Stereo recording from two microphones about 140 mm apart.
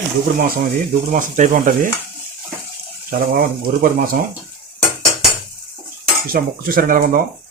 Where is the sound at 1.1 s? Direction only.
70° right (ahead or behind).